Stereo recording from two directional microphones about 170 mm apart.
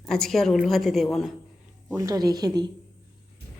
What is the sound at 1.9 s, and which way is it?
Speech, 20° right (ahead or behind).